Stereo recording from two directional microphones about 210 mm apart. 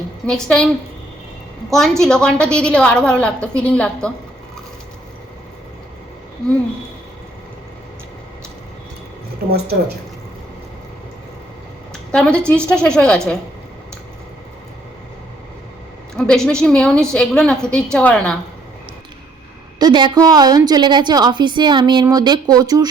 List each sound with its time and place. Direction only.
0.3 s a woman's voice: 5° left (ahead or behind)
1.7 s a woman's voice: centre (ahead or behind)
12.1 s a woman's voice: 5° left (ahead or behind)
16.1 s a woman's voice: 5° left (ahead or behind)
19.8 s a woman's voice: 20° right (ahead or behind)